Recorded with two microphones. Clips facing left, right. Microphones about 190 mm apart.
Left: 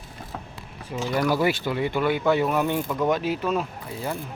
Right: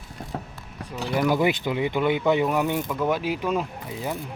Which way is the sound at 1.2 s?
20° right (ahead or behind).